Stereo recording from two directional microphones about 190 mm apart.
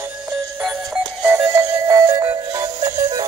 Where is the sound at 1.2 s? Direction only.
10° right (ahead or behind).